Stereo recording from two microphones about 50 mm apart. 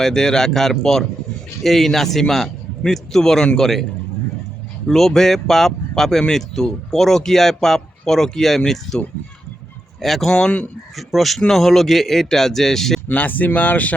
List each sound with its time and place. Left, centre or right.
0.0 s a man's voice: centre
4.9 s a man's voice: centre
10.0 s a man's voice: centre
13.1 s speech: left